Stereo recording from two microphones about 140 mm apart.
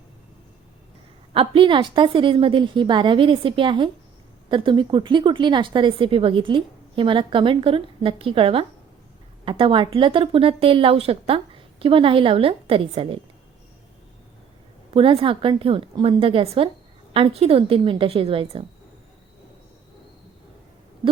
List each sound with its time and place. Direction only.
1.3 s a woman's voice: 40° right (ahead or behind)
14.9 s a woman's voice: 40° right (ahead or behind)